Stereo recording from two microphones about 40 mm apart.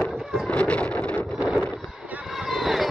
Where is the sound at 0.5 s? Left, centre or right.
Left.